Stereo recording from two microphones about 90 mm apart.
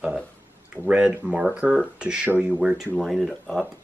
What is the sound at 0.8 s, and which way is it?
Speech, 15° right (ahead or behind).